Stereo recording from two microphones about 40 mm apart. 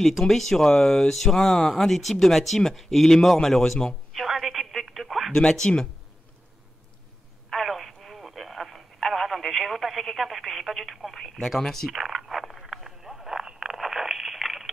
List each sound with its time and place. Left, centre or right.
0.2 s speech: centre
5.7 s speech: left
7.4 s telephone: centre
11.6 s speech: centre
11.9 s frog: centre